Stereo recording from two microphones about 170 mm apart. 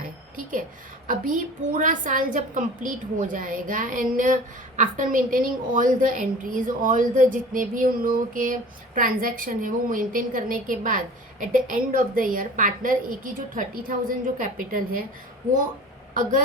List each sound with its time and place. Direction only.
1.0 s a woman's voice: 50° right (ahead or behind)